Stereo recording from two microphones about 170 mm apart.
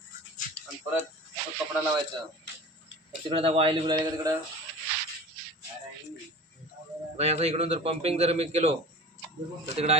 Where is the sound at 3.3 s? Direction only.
35° right (ahead or behind).